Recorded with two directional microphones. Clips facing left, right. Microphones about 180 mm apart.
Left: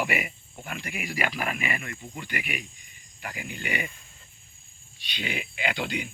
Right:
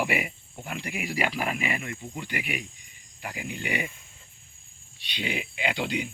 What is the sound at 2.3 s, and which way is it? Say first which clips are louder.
Speech: right 1 dB; 25° right (ahead or behind).